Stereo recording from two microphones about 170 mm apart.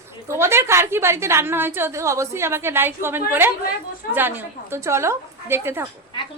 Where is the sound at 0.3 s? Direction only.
15° right (ahead or behind).